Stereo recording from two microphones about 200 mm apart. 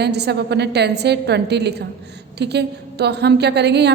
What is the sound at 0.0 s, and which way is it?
A woman's voice, 55° right (ahead or behind).